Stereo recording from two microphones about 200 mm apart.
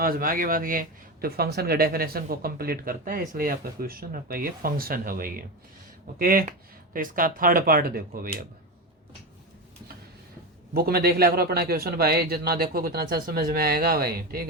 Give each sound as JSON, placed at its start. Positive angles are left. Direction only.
{"t": 0.0, "sound": "speech", "side_deg": -45}
{"t": 10.8, "sound": "speech", "side_deg": -50}